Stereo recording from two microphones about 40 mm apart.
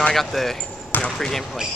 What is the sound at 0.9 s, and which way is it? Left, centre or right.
Basketball bounce, left.